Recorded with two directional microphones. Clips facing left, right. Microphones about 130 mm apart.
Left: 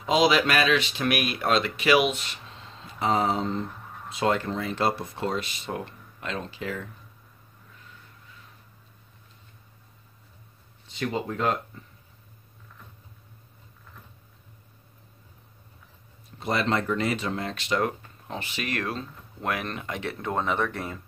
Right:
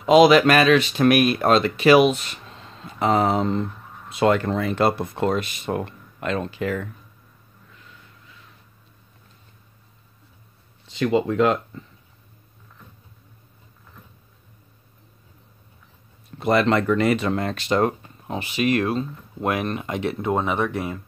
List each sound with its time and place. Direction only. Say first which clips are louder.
0.0 s speech: right 8 dB; 60° right (ahead or behind)
3.0 s speech: right 5 dB; 65° right (ahead or behind)
10.9 s speech: right 9 dB; 90° right
16.3 s speech: right 7 dB; 65° right (ahead or behind)
17.6 s speech: right 5 dB; 35° right (ahead or behind)
18.0 s speech: right 6 dB; 20° right (ahead or behind)